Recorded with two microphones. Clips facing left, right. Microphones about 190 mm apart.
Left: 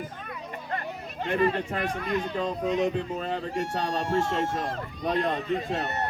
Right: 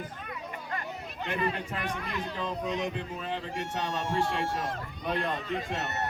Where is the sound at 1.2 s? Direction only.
35° left (ahead or behind).